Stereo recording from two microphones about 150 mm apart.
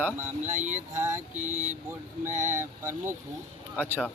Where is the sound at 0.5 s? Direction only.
55° right (ahead or behind).